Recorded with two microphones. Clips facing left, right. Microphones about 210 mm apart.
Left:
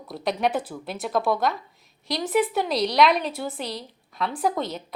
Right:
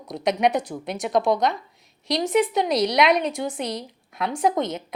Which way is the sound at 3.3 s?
15° right (ahead or behind).